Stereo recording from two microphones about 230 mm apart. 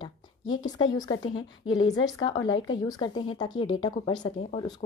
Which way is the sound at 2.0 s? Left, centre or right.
Centre.